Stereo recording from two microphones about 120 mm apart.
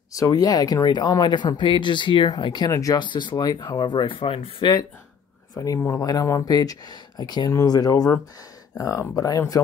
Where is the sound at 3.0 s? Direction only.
40° left (ahead or behind).